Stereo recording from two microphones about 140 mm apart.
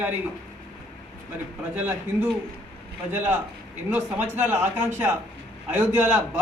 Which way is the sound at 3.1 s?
15° right (ahead or behind).